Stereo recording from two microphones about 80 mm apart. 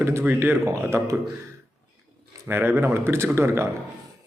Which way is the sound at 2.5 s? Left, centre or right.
Right.